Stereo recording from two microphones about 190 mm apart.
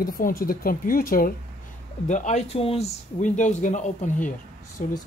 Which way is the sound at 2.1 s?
40° left (ahead or behind).